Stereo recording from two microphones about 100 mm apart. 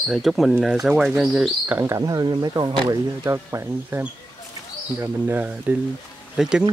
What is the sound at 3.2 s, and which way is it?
Speech, 30° right (ahead or behind).